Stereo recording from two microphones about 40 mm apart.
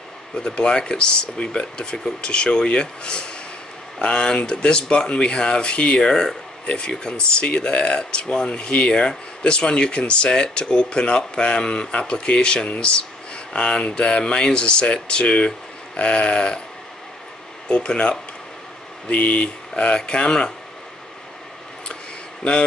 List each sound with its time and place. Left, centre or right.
0.4 s speech: left
5.9 s speech: centre
17.6 s speech: left